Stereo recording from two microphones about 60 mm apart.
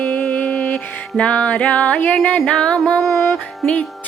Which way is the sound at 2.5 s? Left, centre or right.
Centre.